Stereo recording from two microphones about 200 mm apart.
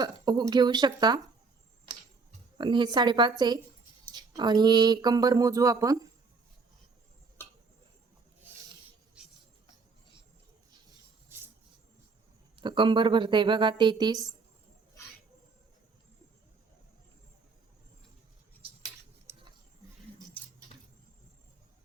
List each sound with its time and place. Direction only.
0.0 s speech: 20° right (ahead or behind)
2.6 s speech: 25° right (ahead or behind)
9.2 s cricket: 5° right (ahead or behind)
11.3 s a sound: 10° right (ahead or behind)
12.5 s speech: 25° right (ahead or behind)
19.3 s a sound: 15° right (ahead or behind)